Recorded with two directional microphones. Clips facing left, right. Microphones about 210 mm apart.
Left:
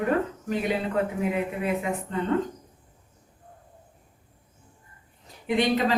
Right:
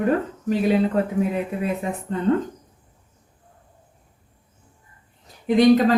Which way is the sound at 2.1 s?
40° right (ahead or behind).